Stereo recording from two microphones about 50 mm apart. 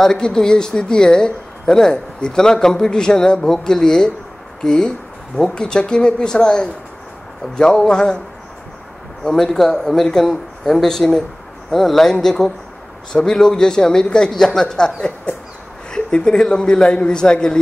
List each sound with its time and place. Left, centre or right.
0.0 s speech: centre
9.2 s speech: centre